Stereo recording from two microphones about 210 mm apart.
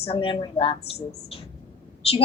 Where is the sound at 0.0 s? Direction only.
25° left (ahead or behind).